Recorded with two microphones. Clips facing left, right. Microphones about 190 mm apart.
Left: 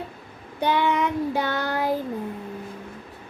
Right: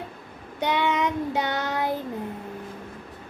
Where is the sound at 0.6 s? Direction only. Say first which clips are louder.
Left 2 dB; 20° right (ahead or behind).